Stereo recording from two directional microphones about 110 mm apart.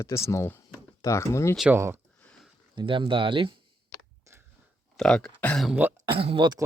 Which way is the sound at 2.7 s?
50° right (ahead or behind).